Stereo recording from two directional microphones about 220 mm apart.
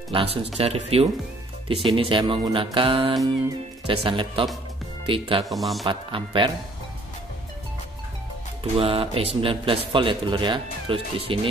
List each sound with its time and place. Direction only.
0.1 s a man's voice: 25° right (ahead or behind)
5.4 s speech: centre (ahead or behind)
5.9 s a man's voice: 20° right (ahead or behind)
8.7 s a man's voice: 25° right (ahead or behind)